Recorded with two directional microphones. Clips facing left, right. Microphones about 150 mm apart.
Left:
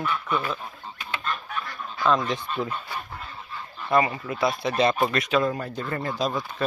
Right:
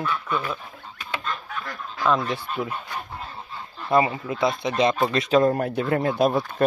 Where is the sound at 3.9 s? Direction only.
20° right (ahead or behind).